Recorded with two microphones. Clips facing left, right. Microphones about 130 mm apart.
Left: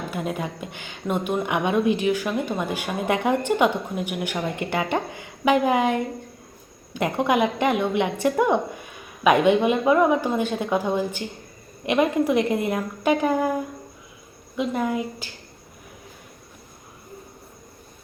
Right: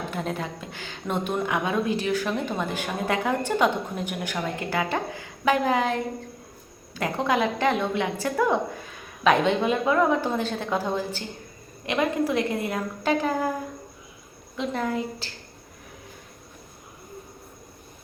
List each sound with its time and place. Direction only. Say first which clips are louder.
0.1 s a woman's voice: left 2 dB; 10° left (ahead or behind)
14.5 s a woman's voice: left 3 dB; 10° left (ahead or behind)